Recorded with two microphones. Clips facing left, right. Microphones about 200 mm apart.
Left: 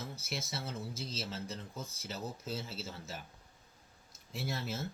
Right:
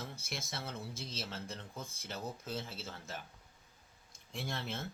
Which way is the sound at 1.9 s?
55° right (ahead or behind).